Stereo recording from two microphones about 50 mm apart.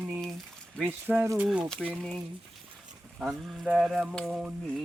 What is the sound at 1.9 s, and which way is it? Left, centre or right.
Mantra, centre.